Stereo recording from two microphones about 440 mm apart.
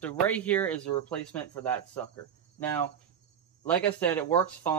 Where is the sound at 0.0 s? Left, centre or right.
Centre.